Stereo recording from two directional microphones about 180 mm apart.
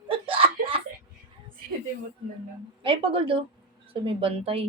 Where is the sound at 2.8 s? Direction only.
30° right (ahead or behind).